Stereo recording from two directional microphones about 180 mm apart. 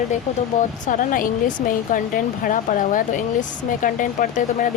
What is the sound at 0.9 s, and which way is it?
A woman's voice, 50° left (ahead or behind).